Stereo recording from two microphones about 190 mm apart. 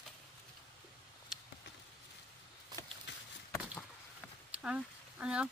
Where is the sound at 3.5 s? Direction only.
15° left (ahead or behind).